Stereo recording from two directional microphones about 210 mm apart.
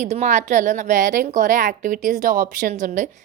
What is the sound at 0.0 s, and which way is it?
A woman's voice, 35° right (ahead or behind).